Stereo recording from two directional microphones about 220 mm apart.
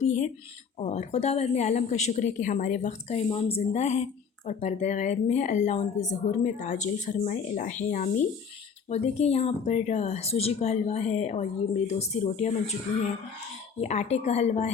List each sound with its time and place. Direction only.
0.0 s speech: 30° left (ahead or behind)
13.8 s speech: 30° left (ahead or behind)